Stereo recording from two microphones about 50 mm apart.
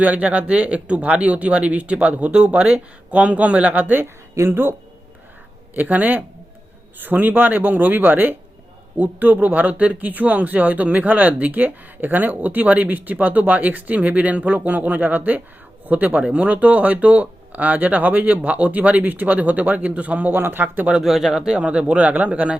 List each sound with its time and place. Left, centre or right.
0.0 s speech: right
4.4 s speech: right
5.7 s speech: right
20.4 s speech: right
21.0 s speech: centre; by 22.5 s right